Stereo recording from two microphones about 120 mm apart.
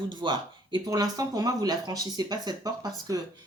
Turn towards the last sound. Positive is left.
turn(degrees=-35)  # may be behind; listen again after turning